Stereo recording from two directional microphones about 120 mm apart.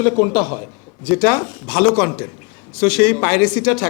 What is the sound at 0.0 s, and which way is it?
A man's voice, 20° left (ahead or behind).